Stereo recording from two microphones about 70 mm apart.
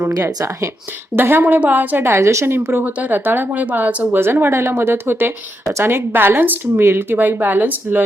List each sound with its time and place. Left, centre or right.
1.1 s a woman's voice: right
4.2 s a woman's voice: right